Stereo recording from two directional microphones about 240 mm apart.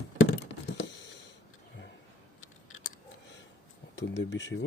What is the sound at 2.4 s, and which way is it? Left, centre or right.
Scissors, left.